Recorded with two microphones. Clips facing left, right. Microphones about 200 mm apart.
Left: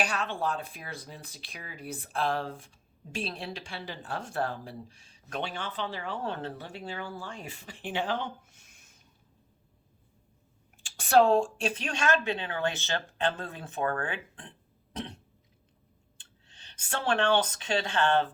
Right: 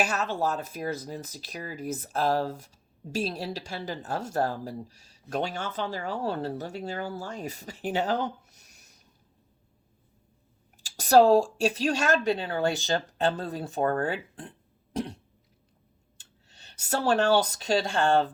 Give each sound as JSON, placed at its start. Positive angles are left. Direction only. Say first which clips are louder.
{"t": 0.0, "sound": "speech", "louder": "right 3 dB", "side_deg": -40}
{"t": 10.8, "sound": "speech", "louder": "right 4 dB", "side_deg": -40}
{"t": 16.1, "sound": "a sound", "louder": "right 4 dB", "side_deg": -40}
{"t": 16.9, "sound": "speech", "louder": "right 4 dB", "side_deg": -40}